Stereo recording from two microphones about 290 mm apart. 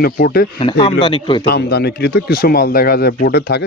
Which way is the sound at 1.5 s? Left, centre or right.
Left.